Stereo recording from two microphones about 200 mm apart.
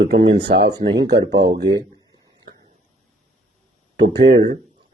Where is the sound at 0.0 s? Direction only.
55° right (ahead or behind).